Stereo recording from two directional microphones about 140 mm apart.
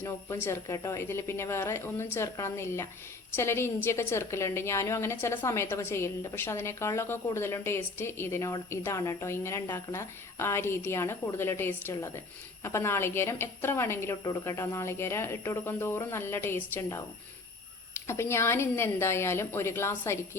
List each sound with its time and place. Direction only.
0.0 s a woman's voice: 20° left (ahead or behind)